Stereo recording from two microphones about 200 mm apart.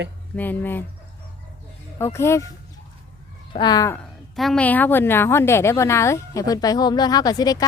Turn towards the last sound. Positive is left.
turn(degrees=20)  # may be behind; listen again after turning